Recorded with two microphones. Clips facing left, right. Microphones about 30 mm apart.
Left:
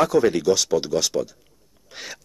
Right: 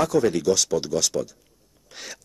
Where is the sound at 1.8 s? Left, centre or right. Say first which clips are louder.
Left 2 dB; centre.